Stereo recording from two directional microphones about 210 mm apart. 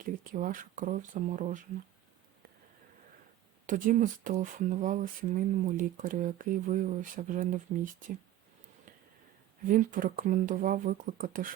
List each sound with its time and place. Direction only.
0.0 s speech: 40° right (ahead or behind)
3.7 s speech: 40° right (ahead or behind)
9.6 s speech: 40° right (ahead or behind)